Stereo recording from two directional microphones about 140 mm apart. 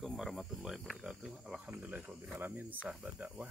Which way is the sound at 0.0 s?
Centre (ahead or behind).